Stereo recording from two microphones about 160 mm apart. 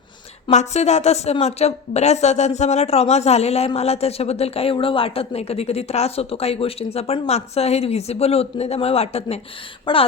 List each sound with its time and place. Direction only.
0.5 s a woman's voice: 45° left (ahead or behind)